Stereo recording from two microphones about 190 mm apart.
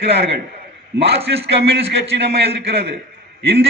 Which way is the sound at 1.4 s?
65° right (ahead or behind).